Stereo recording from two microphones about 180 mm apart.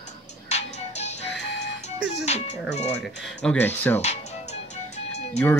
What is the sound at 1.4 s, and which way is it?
Music, 70° left (ahead or behind).